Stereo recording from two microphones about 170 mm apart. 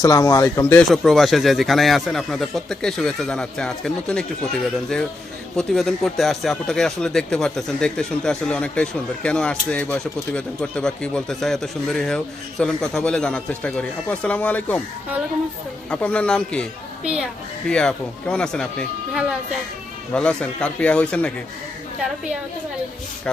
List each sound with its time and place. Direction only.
0.0 s speech: 20° left (ahead or behind)
0.8 s speech: centre (ahead or behind)
15.9 s a man's voice: 5° left (ahead or behind)
17.0 s a woman's voice: 5° right (ahead or behind)
17.7 s a man's voice: 5° left (ahead or behind)